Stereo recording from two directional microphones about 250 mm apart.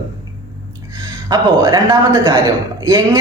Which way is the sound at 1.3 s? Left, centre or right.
Centre.